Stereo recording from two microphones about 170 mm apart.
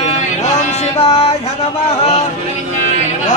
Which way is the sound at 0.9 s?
35° left (ahead or behind).